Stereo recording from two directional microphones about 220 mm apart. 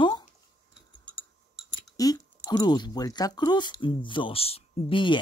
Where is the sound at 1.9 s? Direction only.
15° left (ahead or behind).